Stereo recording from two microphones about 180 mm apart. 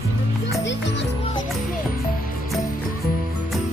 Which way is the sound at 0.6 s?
80° left.